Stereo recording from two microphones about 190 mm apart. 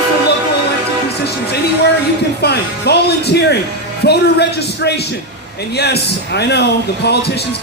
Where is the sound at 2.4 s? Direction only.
60° left (ahead or behind).